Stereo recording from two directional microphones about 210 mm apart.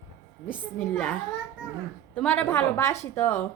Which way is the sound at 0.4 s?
5° right (ahead or behind).